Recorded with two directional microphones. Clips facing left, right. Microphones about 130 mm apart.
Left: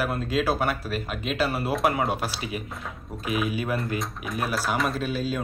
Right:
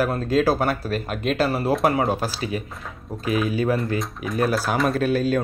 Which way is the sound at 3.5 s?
35° right (ahead or behind).